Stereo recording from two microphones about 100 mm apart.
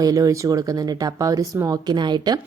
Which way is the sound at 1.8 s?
50° right (ahead or behind).